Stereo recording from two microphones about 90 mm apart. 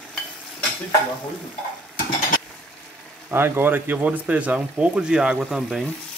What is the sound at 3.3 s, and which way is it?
Speech, 25° right (ahead or behind).